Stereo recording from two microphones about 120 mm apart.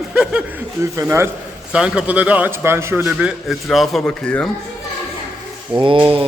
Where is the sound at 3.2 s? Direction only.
Centre (ahead or behind).